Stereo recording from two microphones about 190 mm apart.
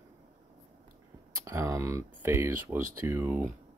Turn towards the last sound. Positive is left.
turn(degrees=-10)  # may be behind; listen again after turning